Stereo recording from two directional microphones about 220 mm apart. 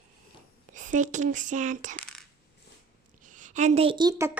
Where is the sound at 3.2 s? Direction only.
35° right (ahead or behind); by 4.3 s 20° right (ahead or behind).